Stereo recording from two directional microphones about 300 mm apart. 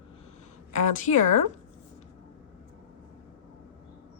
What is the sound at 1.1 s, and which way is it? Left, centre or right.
Speech, left.